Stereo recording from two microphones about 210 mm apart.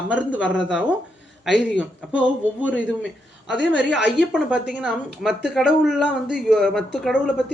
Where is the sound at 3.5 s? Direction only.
55° left (ahead or behind).